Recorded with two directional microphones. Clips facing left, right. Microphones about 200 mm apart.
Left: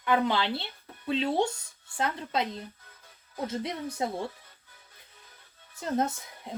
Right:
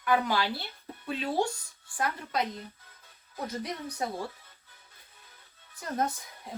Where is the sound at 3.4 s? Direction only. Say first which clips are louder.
Left 3 dB; 25° left (ahead or behind).